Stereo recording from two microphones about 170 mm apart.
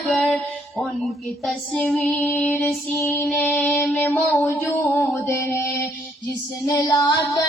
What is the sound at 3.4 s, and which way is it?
Music, 10° left (ahead or behind).